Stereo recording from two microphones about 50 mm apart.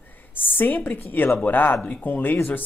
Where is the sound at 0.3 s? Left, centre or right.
Left.